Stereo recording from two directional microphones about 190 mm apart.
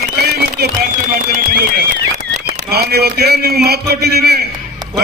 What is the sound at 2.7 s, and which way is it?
A man's voice, 55° right (ahead or behind).